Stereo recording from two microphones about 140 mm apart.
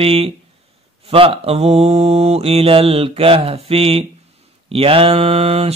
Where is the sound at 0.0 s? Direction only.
45° right (ahead or behind).